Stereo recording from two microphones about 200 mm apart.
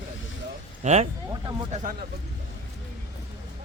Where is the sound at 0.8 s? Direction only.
35° right (ahead or behind).